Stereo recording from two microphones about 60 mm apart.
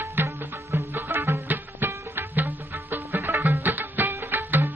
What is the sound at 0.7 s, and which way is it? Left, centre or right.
Music, right.